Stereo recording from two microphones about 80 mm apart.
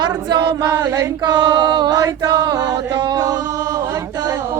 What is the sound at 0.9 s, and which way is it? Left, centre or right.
Female singing, right.